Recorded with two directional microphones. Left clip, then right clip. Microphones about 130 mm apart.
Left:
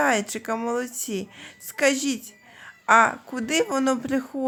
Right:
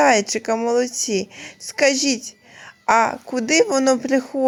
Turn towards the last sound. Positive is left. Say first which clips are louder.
# right 7 dB
turn(degrees=-35)  # may be behind; listen again after turning